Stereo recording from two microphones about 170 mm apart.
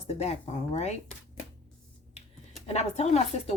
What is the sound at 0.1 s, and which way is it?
Speech, 40° left (ahead or behind).